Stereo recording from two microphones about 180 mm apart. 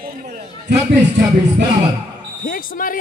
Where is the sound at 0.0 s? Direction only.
55° right (ahead or behind).